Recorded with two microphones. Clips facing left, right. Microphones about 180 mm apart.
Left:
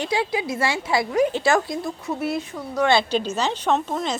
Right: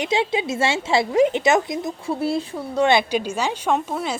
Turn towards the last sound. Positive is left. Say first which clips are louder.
# even
turn(degrees=-10)  # may be behind; listen again after turning